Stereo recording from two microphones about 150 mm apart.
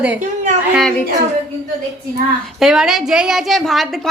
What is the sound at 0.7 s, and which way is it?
Speech, centre (ahead or behind).